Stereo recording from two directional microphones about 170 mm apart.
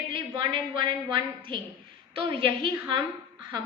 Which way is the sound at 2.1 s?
30° right (ahead or behind).